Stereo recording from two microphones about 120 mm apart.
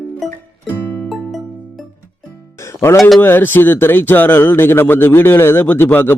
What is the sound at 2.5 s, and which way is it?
Music, 25° left (ahead or behind).